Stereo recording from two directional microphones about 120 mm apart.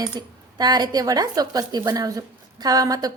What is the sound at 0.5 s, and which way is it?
A woman's voice, 35° right (ahead or behind).